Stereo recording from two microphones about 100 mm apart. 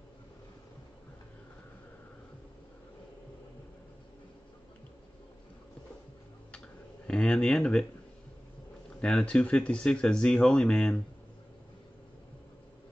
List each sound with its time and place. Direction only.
7.1 s speech: 10° left (ahead or behind)
9.0 s speech: 10° left (ahead or behind)